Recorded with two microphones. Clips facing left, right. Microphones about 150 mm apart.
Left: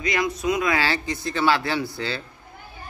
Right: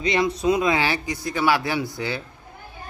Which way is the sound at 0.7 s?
15° right (ahead or behind).